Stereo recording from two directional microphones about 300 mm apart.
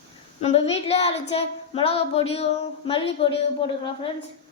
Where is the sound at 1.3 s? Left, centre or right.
Centre.